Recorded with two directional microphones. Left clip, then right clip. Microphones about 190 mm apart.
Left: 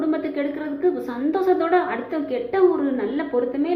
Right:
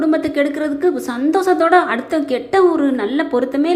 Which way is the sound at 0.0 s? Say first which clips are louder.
Right 7 dB; 30° right (ahead or behind).